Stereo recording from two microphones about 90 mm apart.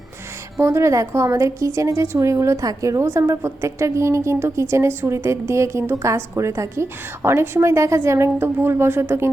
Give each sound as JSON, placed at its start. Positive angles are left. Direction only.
{"t": 0.6, "sound": "a woman's voice", "side_deg": -30}